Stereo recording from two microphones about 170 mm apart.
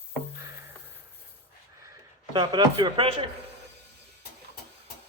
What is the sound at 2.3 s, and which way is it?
Speech, 25° right (ahead or behind).